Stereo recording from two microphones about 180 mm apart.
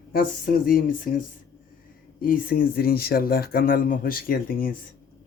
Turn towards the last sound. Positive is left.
turn(degrees=55)  # may be behind; listen again after turning